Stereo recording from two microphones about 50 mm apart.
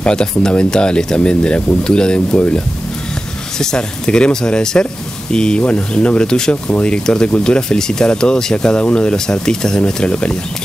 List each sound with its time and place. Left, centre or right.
0.0 s speech: centre
3.5 s speech: centre